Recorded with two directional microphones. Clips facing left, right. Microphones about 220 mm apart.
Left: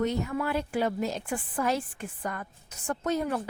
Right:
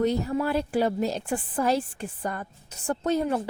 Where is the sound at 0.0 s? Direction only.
35° right (ahead or behind).